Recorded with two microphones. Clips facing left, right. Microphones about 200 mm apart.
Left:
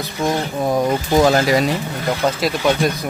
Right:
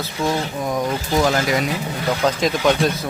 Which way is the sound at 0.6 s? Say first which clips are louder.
Left 4 dB; 35° left (ahead or behind).